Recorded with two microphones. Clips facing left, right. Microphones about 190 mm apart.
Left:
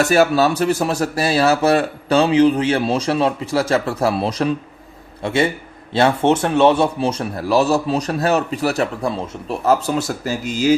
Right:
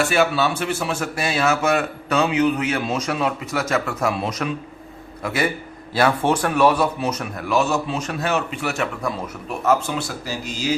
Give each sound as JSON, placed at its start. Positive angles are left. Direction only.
{"t": 0.0, "sound": "a man's voice", "side_deg": 40}